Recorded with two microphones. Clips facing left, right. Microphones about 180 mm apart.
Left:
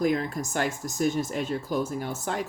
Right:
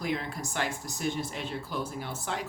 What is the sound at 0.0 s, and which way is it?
Speech, 45° left (ahead or behind).